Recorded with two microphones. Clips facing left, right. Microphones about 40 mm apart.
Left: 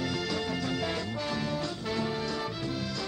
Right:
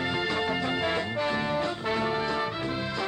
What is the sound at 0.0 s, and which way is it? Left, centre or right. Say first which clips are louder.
Music: right 4 dB; right.